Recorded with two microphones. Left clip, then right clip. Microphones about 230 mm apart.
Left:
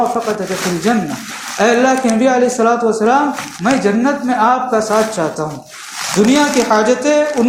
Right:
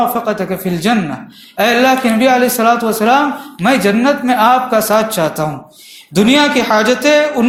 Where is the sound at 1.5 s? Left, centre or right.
Right.